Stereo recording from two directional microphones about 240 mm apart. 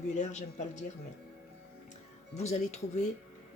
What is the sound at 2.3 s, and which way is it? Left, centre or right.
Speech, left.